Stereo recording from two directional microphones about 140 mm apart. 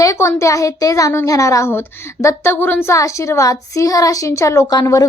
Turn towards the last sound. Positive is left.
turn(degrees=25)  # may be behind; listen again after turning